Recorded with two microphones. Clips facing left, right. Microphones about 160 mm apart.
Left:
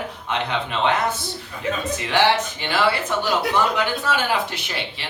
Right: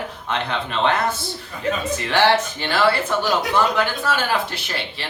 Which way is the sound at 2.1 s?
15° left (ahead or behind).